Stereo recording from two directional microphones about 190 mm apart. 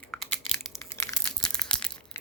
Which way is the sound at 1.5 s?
5° left (ahead or behind).